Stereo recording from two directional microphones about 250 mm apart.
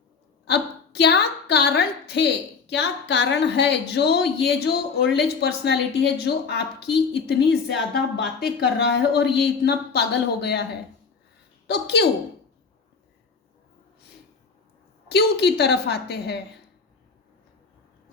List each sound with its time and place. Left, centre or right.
0.4 s a woman's voice: left
8.2 s speech: centre
8.8 s speech: left
11.6 s a woman's voice: left
15.1 s speech: left